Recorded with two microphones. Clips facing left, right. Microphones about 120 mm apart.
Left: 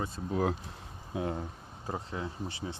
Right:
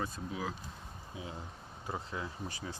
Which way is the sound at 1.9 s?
35° left (ahead or behind).